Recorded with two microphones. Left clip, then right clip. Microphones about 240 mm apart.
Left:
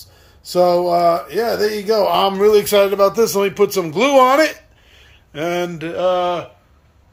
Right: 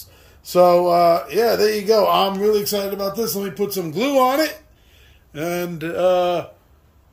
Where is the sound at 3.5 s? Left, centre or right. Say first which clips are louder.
Left 7 dB; centre.